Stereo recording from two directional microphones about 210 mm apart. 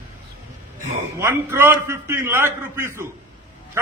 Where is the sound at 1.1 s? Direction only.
10° right (ahead or behind).